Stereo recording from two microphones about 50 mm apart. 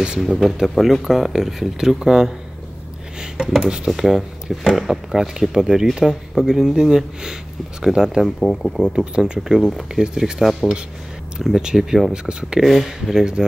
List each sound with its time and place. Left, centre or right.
0.2 s speech: centre
8.4 s speech: centre
8.8 s speech: centre
12.6 s speech: centre
13.2 s speech: centre